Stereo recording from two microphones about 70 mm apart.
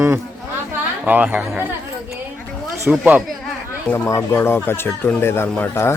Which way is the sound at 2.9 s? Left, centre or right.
Centre.